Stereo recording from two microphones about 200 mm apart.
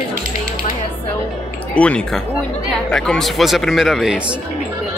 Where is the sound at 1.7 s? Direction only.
5° left (ahead or behind).